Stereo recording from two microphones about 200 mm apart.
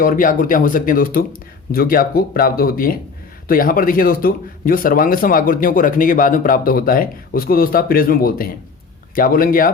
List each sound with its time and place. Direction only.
0.0 s speech: 45° left (ahead or behind)